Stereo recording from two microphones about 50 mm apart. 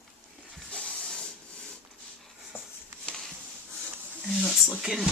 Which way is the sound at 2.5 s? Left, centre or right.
Left.